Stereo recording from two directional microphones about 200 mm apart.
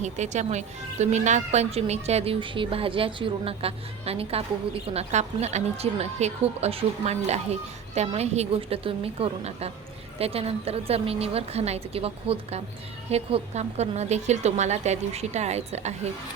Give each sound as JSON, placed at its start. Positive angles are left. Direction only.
{"t": 0.0, "sound": "a woman's voice", "side_deg": -35}